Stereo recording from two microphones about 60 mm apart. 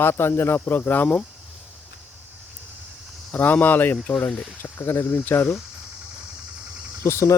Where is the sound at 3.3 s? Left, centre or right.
Left.